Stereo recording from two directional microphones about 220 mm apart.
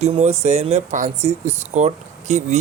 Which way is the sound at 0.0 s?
30° right (ahead or behind).